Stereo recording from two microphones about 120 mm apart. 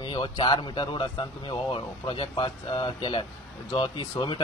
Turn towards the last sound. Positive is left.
turn(degrees=40)  # may be behind; listen again after turning